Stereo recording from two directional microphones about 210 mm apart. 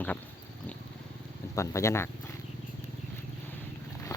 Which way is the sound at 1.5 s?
15° left (ahead or behind).